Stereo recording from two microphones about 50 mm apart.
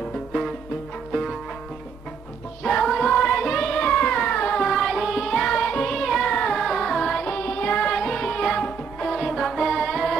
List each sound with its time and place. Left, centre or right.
2.6 s music: centre
3.8 s music: left
4.6 s music: centre
5.5 s music: left
5.9 s music: centre
7.3 s music: left; by 9.2 s centre
9.2 s music: centre